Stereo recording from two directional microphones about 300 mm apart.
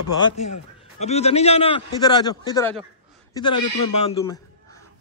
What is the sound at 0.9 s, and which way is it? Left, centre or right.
A man's voice, left.